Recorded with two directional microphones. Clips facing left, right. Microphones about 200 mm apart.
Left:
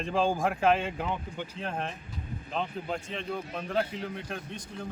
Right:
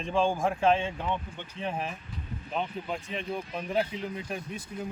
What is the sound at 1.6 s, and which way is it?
Speech, 5° right (ahead or behind).